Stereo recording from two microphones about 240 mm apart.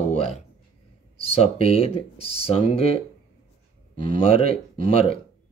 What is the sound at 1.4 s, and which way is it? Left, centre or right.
Speech, left.